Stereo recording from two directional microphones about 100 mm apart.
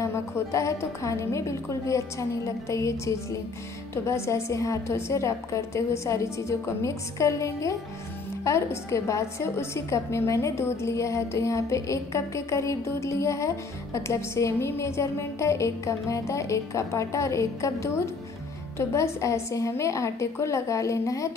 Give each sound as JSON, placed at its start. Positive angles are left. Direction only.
{"t": 0.0, "sound": "a woman's voice", "side_deg": 30}